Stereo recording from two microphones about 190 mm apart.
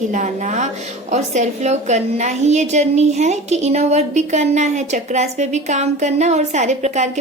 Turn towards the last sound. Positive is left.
turn(degrees=-35)  # may be behind; listen again after turning